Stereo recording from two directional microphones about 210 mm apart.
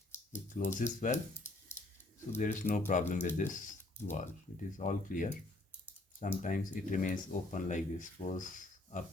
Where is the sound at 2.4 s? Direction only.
40° left (ahead or behind).